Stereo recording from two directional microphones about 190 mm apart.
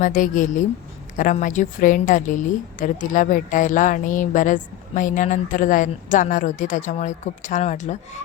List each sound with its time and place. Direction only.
0.0 s a woman's voice: 45° left (ahead or behind)